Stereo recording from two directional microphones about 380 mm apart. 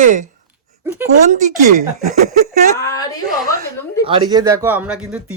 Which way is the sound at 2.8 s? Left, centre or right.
Centre.